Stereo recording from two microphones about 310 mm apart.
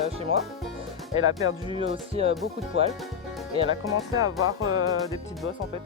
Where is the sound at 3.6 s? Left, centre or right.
Centre.